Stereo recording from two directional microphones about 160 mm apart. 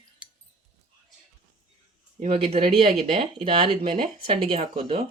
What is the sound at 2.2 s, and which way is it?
Speech, 35° right (ahead or behind).